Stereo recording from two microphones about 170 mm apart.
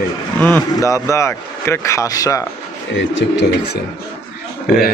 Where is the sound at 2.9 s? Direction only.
90° left.